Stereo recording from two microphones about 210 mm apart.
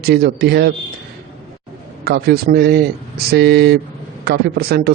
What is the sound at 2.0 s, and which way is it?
A man's voice, 50° right (ahead or behind).